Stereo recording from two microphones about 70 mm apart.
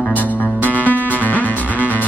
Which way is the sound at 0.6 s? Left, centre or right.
Left.